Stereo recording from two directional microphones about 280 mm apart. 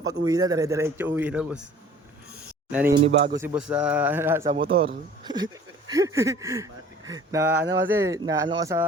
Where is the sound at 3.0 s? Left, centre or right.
Right.